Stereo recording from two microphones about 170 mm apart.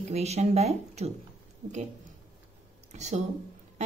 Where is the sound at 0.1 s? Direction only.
40° right (ahead or behind).